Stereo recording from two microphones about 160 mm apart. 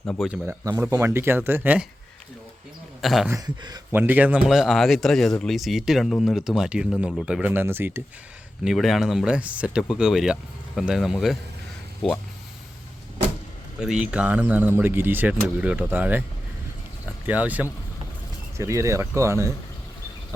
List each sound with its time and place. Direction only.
0.4 s speech: 20° right (ahead or behind)
3.0 s speech: centre (ahead or behind)
3.2 s speech: 25° right (ahead or behind)
3.9 s speech: 10° right (ahead or behind)
8.6 s speech: centre (ahead or behind)
13.7 s speech: 5° right (ahead or behind)
17.2 s speech: 10° right (ahead or behind)